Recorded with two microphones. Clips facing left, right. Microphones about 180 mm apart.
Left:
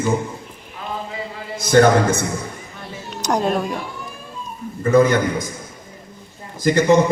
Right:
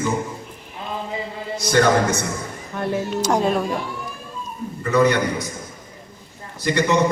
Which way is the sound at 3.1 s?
Centre (ahead or behind).